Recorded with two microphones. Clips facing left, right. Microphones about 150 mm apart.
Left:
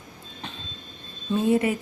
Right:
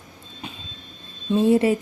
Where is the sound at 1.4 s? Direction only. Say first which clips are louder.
Right 4 dB; 30° right (ahead or behind).